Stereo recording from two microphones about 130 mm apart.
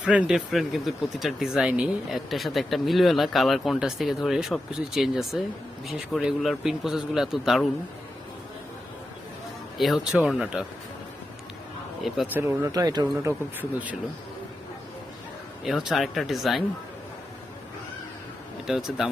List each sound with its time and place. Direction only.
0.0 s speech: 10° right (ahead or behind)
9.7 s speech: centre (ahead or behind)
12.0 s speech: centre (ahead or behind)
12.3 s speech: 15° right (ahead or behind)
13.2 s speech: 15° right (ahead or behind)
15.6 s speech: centre (ahead or behind)
18.6 s speech: 5° right (ahead or behind)